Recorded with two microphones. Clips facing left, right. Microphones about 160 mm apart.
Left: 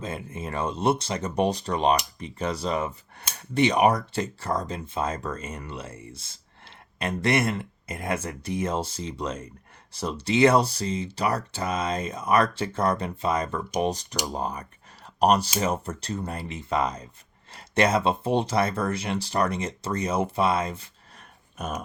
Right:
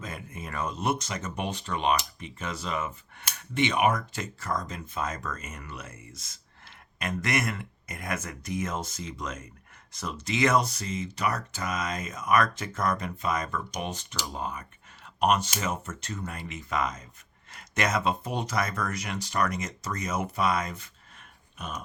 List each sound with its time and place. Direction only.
0.0 s speech: 30° left (ahead or behind)
14.3 s a sound: 35° left (ahead or behind)
15.5 s speech: 35° left (ahead or behind)